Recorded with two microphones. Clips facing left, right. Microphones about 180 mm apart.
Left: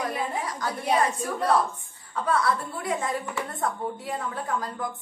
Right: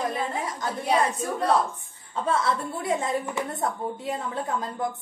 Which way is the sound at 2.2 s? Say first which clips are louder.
Even; 25° right (ahead or behind).